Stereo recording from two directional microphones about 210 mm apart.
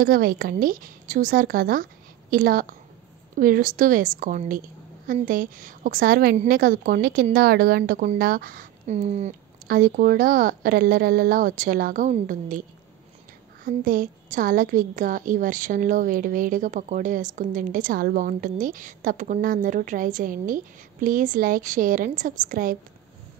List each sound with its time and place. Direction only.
0.0 s a woman's voice: 45° right (ahead or behind)
13.7 s a woman's voice: 40° right (ahead or behind)